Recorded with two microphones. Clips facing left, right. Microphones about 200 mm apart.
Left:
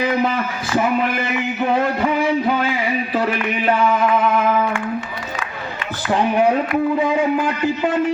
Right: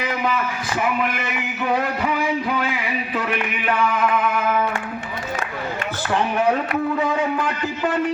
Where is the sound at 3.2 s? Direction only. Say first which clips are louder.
Left 4 dB; 30° left (ahead or behind).